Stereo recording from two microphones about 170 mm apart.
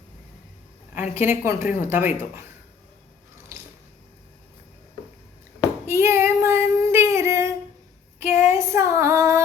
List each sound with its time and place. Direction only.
1.1 s a woman's voice: 15° right (ahead or behind)
5.8 s female singing: 15° right (ahead or behind)
8.2 s child singing: 45° left (ahead or behind)
8.4 s female singing: 15° right (ahead or behind)